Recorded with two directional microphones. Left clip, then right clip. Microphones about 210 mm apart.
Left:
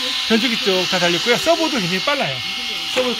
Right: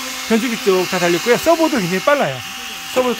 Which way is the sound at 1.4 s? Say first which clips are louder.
Right 2 dB; 25° right (ahead or behind).